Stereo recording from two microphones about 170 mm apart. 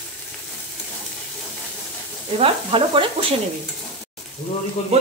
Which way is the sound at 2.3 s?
30° right (ahead or behind).